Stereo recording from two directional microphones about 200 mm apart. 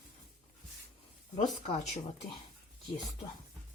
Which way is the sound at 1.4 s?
35° left (ahead or behind).